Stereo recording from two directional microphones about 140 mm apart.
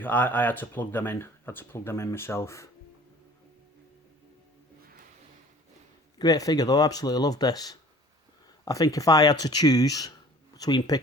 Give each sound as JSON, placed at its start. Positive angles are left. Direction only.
{"t": 0.0, "sound": "speech", "side_deg": 15}
{"t": 6.1, "sound": "speech", "side_deg": 25}